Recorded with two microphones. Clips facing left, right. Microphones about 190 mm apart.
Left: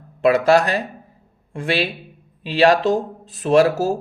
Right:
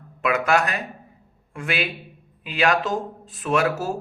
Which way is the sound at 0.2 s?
35° left (ahead or behind).